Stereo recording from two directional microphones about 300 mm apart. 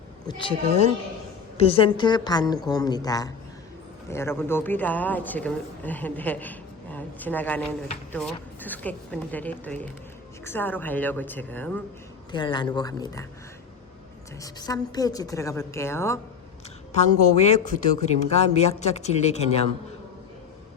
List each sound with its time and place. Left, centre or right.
0.3 s a woman's voice: centre
14.4 s a woman's voice: centre
16.9 s speech: left